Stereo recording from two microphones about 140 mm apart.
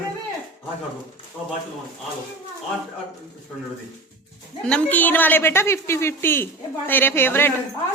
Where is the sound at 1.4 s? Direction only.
5° right (ahead or behind).